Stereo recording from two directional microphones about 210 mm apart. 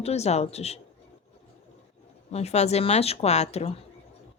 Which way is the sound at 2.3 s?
30° left (ahead or behind).